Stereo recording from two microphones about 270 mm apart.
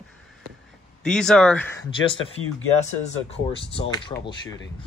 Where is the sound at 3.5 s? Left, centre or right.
Centre.